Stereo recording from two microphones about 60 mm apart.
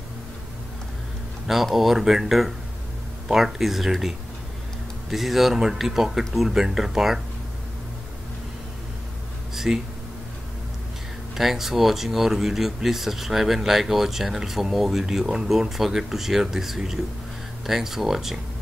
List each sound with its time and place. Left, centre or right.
1.5 s speech: centre
5.1 s speech: centre
9.7 s speech: right
11.3 s speech: centre